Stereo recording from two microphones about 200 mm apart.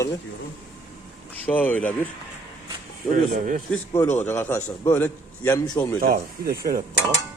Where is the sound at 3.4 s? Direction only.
40° right (ahead or behind).